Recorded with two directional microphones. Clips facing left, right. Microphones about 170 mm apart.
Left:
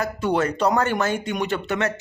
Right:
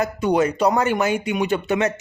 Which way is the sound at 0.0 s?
15° right (ahead or behind).